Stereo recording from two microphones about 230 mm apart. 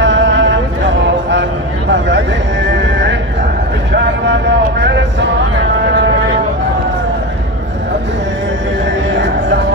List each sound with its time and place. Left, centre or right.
0.0 s music: right
1.9 s horse: right
4.3 s a sound: right